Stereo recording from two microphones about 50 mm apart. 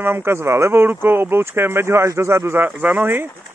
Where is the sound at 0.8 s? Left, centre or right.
Right.